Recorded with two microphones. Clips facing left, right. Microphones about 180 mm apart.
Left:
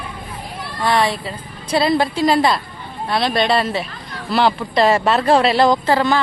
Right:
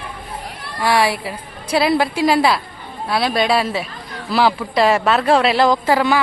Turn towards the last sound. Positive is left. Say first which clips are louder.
# even
turn(degrees=-10)  # may be behind; listen again after turning